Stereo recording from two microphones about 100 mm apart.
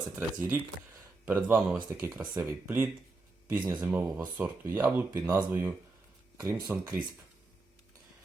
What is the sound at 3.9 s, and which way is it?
Speech, 15° right (ahead or behind).